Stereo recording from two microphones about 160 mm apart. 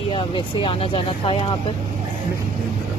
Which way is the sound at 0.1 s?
30° left (ahead or behind).